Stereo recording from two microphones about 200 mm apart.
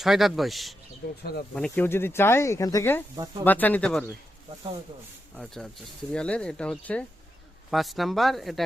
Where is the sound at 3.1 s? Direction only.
20° right (ahead or behind).